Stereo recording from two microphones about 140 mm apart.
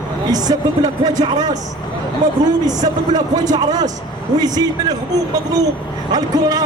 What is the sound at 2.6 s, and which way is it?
A man's voice, 30° right (ahead or behind).